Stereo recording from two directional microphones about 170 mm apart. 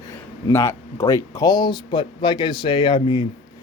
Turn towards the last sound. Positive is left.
turn(degrees=30)  # may be behind; listen again after turning